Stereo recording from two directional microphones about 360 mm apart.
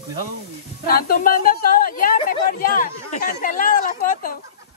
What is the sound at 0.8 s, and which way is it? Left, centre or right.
Speech, left.